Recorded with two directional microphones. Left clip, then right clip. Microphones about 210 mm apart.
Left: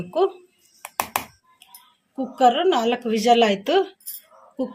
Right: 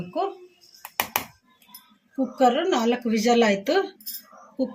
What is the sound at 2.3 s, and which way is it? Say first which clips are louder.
A woman's voice: left 4 dB; 30° left (ahead or behind).